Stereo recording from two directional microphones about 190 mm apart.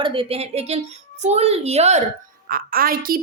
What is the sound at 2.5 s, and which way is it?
Speech, 50° right (ahead or behind).